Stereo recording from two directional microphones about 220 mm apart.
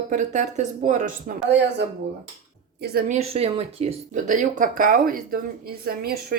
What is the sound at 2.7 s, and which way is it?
Speech, 45° right (ahead or behind).